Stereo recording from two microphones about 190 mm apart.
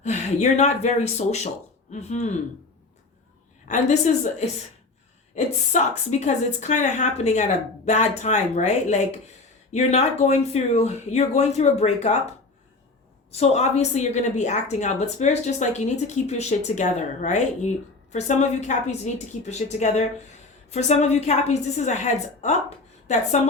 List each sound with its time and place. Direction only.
0.0 s a woman's voice: 35° left (ahead or behind)
3.7 s a woman's voice: 40° left (ahead or behind)
13.3 s a woman's voice: 35° left (ahead or behind)